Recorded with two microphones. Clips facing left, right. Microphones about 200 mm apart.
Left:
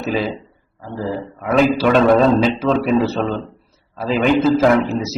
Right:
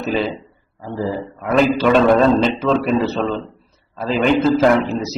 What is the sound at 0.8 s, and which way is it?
Speech, 15° right (ahead or behind).